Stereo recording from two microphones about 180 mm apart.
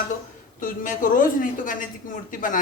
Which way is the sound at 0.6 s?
50° left (ahead or behind).